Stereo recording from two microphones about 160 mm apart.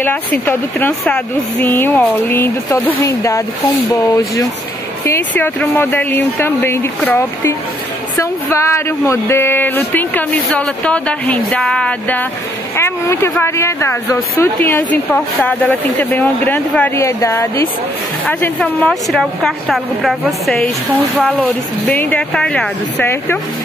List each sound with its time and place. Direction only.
0.0 s speech: 10° left (ahead or behind)